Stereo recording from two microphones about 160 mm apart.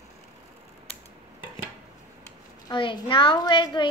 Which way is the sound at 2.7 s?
30° left (ahead or behind).